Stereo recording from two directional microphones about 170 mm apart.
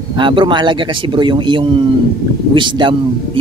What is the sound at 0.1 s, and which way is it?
Speech, 30° right (ahead or behind).